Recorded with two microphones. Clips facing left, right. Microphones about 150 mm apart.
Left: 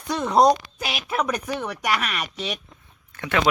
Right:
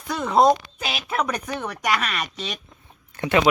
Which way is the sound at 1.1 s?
10° left (ahead or behind).